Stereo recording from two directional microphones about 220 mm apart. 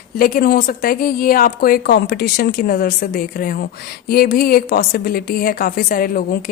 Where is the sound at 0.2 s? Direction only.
40° left (ahead or behind).